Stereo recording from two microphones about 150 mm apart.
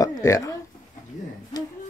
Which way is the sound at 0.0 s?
25° left (ahead or behind).